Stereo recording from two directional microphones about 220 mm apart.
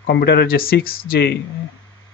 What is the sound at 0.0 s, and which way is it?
Speech, 50° left (ahead or behind).